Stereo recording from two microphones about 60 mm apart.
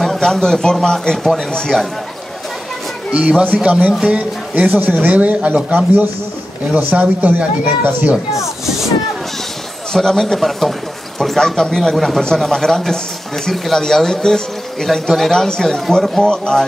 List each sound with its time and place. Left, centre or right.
0.0 s speech: centre
3.1 s speech: centre
4.6 s a man's voice: right
9.9 s a man's voice: centre